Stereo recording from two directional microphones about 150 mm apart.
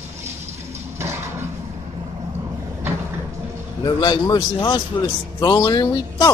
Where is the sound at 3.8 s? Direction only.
30° left (ahead or behind).